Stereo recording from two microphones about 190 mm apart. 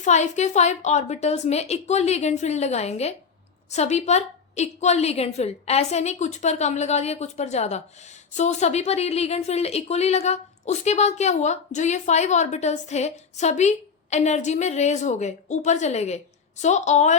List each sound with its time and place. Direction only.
0.0 s a woman's voice: 35° left (ahead or behind)